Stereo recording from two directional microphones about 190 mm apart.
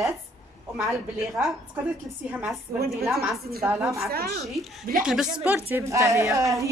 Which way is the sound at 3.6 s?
10° right (ahead or behind).